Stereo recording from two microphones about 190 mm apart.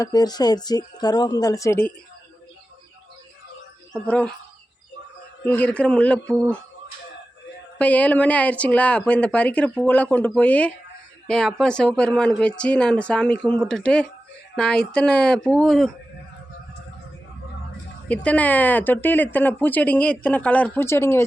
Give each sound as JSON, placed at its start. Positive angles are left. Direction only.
{"t": 0.0, "sound": "a woman's voice", "side_deg": 20}
{"t": 3.9, "sound": "speech", "side_deg": 5}
{"t": 5.5, "sound": "speech", "side_deg": 10}
{"t": 7.8, "sound": "speech", "side_deg": 5}
{"t": 18.1, "sound": "speech", "side_deg": 5}